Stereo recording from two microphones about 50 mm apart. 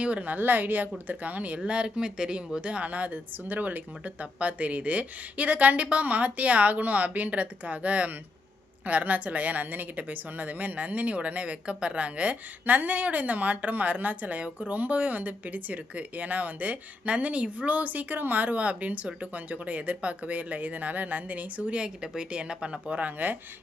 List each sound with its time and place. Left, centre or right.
0.0 s a woman's voice: right